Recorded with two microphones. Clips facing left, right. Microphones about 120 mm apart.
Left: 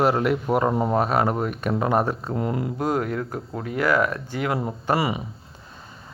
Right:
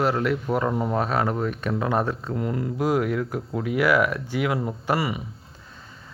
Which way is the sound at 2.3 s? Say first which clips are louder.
Left 1 dB; 25° left (ahead or behind).